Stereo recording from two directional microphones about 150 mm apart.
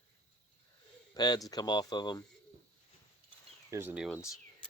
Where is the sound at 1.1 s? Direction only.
25° left (ahead or behind).